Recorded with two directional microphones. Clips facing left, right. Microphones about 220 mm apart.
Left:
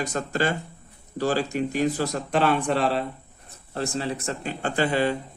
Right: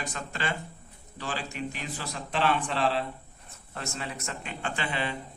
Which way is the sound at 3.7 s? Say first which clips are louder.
Left 9 dB; 35° left (ahead or behind).